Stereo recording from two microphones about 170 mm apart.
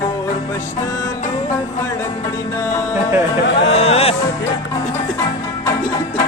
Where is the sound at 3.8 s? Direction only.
35° left (ahead or behind).